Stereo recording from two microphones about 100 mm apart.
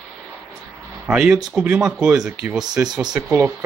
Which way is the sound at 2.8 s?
20° right (ahead or behind).